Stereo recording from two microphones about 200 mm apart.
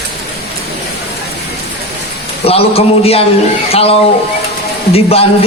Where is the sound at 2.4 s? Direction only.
30° left (ahead or behind).